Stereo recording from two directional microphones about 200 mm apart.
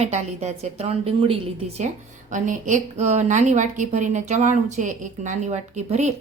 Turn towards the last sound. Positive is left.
turn(degrees=-35)  # may be behind; listen again after turning